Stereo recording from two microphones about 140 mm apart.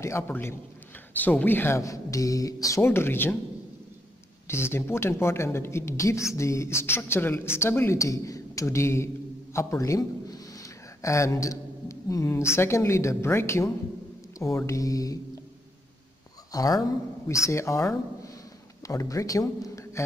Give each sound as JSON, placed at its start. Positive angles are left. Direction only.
{"t": 0.0, "sound": "speech", "side_deg": 20}
{"t": 4.5, "sound": "a woman's voice", "side_deg": 20}
{"t": 16.5, "sound": "speech", "side_deg": 25}